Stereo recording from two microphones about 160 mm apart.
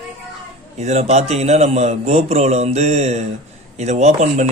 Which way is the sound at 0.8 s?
45° right (ahead or behind).